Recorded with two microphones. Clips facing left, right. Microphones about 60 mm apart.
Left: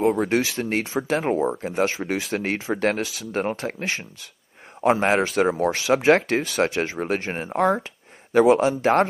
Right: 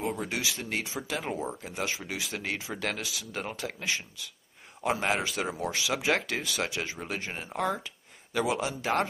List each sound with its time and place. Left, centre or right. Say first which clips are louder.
0.0 s speech: left 11 dB; left